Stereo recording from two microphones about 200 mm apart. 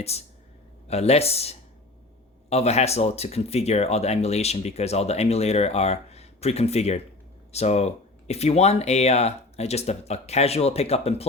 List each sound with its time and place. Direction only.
0.0 s speech: 30° left (ahead or behind)